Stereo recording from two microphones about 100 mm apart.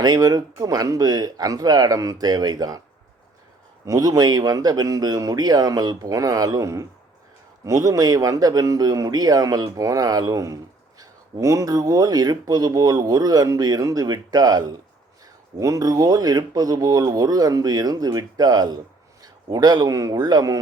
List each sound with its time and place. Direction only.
0.0 s speech: 40° right (ahead or behind)
3.8 s speech: 35° right (ahead or behind)